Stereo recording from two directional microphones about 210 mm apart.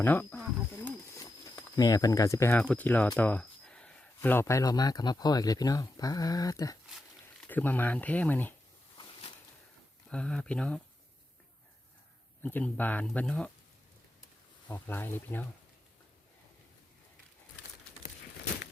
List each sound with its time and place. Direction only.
0.0 s speech: 10° left (ahead or behind)
0.9 s wild animals: 15° left (ahead or behind)
1.7 s speech: 15° left (ahead or behind)
10.1 s speech: 5° left (ahead or behind)
12.4 s speech: 10° left (ahead or behind)
14.7 s speech: 10° left (ahead or behind)